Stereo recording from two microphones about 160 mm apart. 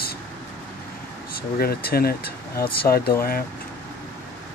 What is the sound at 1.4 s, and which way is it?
Speech, 75° left (ahead or behind).